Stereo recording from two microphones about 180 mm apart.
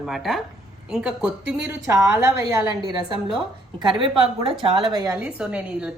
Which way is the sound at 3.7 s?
30° right (ahead or behind).